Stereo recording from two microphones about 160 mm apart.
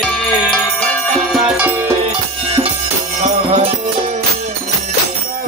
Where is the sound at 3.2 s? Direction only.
45° right (ahead or behind).